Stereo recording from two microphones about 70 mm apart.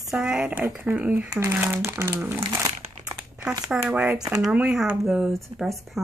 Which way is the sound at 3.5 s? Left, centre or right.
Centre.